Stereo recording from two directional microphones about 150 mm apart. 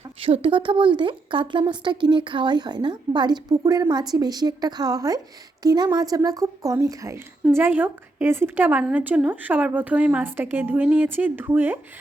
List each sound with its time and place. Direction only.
0.2 s a woman's voice: 35° right (ahead or behind); by 11.8 s 10° right (ahead or behind)